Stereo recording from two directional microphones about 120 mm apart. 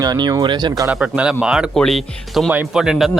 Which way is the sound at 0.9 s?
10° right (ahead or behind).